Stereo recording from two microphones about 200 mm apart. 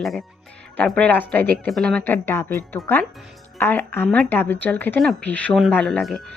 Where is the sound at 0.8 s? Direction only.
5° left (ahead or behind).